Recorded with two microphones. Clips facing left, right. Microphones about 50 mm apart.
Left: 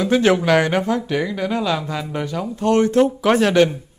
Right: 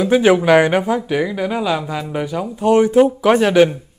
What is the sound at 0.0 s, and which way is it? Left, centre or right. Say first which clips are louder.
Speech: right 3 dB; centre.